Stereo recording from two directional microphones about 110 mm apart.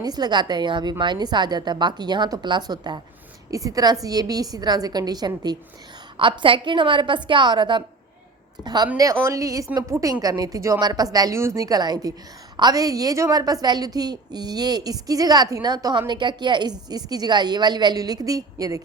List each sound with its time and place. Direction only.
0.0 s a woman's voice: 40° right (ahead or behind)
6.1 s a woman's voice: 50° right (ahead or behind); by 18.8 s 35° right (ahead or behind)